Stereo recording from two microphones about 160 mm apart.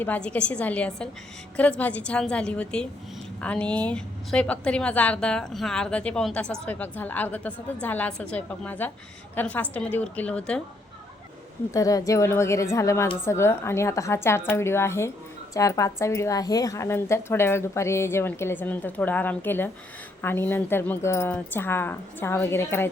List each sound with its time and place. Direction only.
0.0 s a woman's voice: 10° left (ahead or behind)
11.7 s a woman's voice: 20° left (ahead or behind)